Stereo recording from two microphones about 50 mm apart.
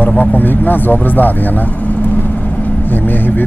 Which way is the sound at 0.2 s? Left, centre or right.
Left.